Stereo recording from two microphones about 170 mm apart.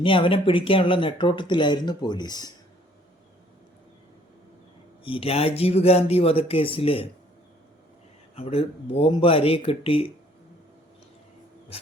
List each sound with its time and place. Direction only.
0.0 s speech: 30° left (ahead or behind)
5.0 s speech: 35° left (ahead or behind)
8.4 s speech: 35° left (ahead or behind)
11.7 s speech: 35° left (ahead or behind)